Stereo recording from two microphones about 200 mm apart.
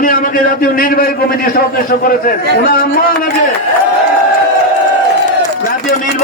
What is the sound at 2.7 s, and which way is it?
Speech, 45° left (ahead or behind).